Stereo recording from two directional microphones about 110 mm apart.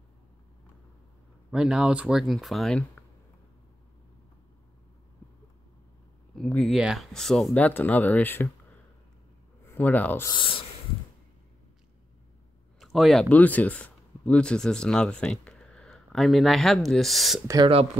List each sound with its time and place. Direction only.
1.5 s speech: 5° right (ahead or behind)
6.3 s speech: 5° left (ahead or behind)
9.7 s speech: 15° left (ahead or behind)
10.3 s speech: 50° left (ahead or behind)
12.7 s a sound: centre (ahead or behind)
13.3 s speech: 15° left (ahead or behind)